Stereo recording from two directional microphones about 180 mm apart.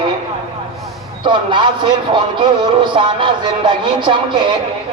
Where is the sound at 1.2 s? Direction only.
25° right (ahead or behind).